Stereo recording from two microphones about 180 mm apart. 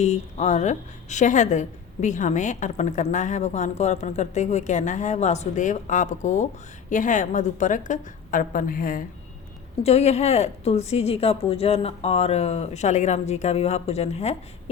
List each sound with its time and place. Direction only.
0.0 s a woman's voice: 40° left (ahead or behind)
9.8 s a woman's voice: 35° left (ahead or behind)